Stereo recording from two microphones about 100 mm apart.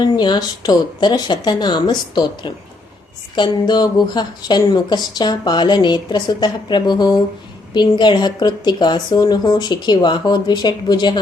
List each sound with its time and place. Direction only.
0.0 s speech: 45° left (ahead or behind)